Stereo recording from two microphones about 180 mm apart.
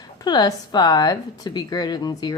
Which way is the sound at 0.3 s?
25° left (ahead or behind).